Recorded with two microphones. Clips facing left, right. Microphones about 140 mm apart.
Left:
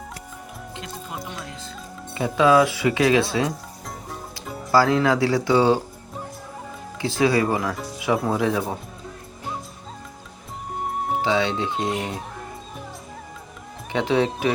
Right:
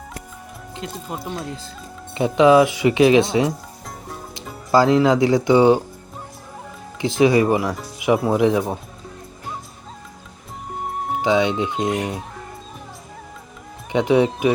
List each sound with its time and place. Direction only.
1.2 s speech: 30° right (ahead or behind)
2.1 s speech: 20° right (ahead or behind)
4.7 s speech: 20° right (ahead or behind)
7.0 s speech: 15° right (ahead or behind)
11.2 s speech: 15° right (ahead or behind)
13.9 s speech: 15° right (ahead or behind)